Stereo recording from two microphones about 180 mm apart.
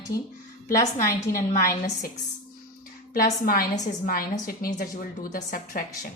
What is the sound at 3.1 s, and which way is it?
A woman's voice, 55° left (ahead or behind).